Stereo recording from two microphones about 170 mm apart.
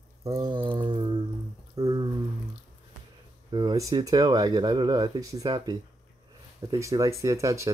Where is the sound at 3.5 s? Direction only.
25° right (ahead or behind).